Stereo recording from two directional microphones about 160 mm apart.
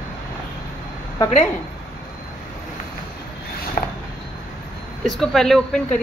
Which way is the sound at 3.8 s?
60° left (ahead or behind).